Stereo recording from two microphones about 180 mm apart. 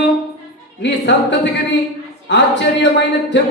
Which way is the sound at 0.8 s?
80° left.